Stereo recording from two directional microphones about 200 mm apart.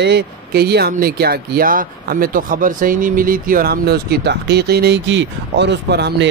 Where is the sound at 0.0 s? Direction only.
55° right (ahead or behind).